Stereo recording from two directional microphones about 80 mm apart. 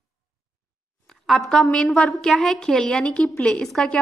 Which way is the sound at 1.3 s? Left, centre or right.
Centre.